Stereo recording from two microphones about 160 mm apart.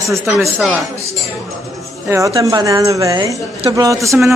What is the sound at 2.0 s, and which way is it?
Speech, 20° right (ahead or behind).